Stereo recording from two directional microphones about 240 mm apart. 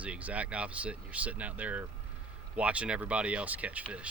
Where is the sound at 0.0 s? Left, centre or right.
Centre.